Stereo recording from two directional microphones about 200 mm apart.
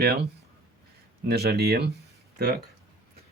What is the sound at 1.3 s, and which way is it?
Speech, 50° right (ahead or behind).